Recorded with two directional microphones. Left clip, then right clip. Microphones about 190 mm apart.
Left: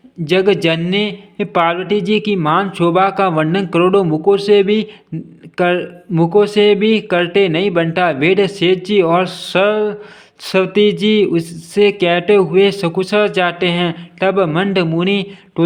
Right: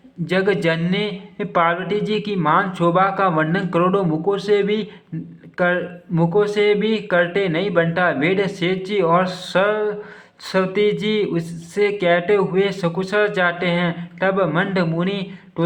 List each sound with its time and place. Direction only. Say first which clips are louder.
0.3 s a man's voice: left 5 dB; 30° left (ahead or behind)